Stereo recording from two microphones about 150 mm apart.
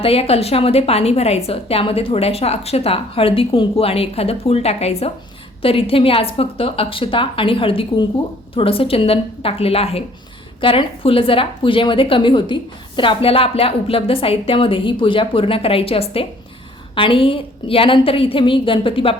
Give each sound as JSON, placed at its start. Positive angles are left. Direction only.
{"t": 0.0, "sound": "a woman's voice", "side_deg": 40}